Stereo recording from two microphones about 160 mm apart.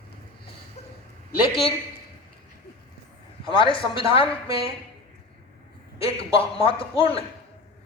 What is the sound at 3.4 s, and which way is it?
A man's voice, 30° left (ahead or behind).